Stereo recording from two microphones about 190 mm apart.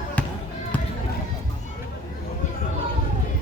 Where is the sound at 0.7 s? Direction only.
10° left (ahead or behind).